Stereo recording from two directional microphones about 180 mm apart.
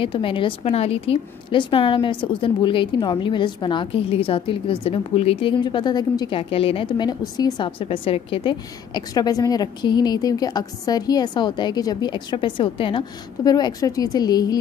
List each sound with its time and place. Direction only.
0.0 s a woman's voice: 30° left (ahead or behind)